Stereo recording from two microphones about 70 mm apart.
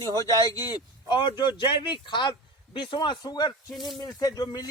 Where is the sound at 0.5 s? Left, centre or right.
Left.